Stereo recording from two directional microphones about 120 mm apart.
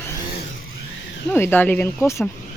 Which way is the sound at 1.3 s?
15° left (ahead or behind).